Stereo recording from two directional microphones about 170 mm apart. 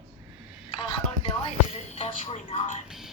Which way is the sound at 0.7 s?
25° left (ahead or behind).